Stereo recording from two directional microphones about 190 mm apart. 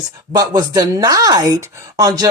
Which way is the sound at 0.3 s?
20° right (ahead or behind).